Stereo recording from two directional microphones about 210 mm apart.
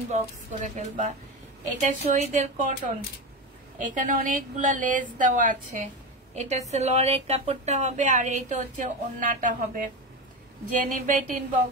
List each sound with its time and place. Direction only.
0.1 s a woman's voice: 35° right (ahead or behind)
3.8 s a woman's voice: 40° right (ahead or behind)